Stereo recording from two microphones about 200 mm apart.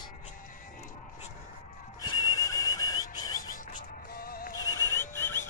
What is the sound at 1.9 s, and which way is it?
Whistle, 15° left (ahead or behind).